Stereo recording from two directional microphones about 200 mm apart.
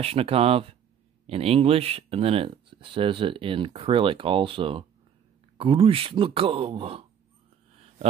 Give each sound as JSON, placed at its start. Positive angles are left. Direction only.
{"t": 0.0, "sound": "speech", "side_deg": -30}